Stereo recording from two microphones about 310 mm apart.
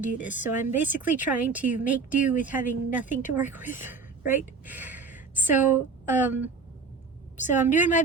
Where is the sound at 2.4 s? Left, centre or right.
Centre.